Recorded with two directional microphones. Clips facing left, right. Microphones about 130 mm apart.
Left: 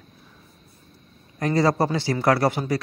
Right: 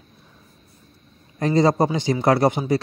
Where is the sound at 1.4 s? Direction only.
20° right (ahead or behind).